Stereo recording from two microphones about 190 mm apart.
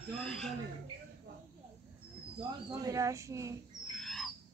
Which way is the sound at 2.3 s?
20° right (ahead or behind).